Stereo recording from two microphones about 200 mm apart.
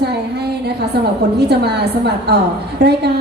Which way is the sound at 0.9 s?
55° right (ahead or behind).